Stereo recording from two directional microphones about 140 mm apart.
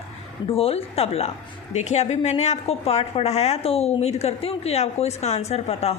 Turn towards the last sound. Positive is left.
turn(degrees=45)  # may be behind; listen again after turning